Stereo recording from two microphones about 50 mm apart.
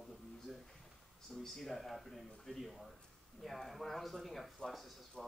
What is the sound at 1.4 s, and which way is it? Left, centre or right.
Speech, centre.